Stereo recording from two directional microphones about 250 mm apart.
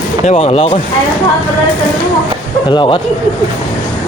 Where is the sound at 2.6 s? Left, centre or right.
Centre.